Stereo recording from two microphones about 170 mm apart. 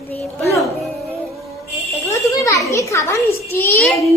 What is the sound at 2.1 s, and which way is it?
A child's voice, 20° left (ahead or behind).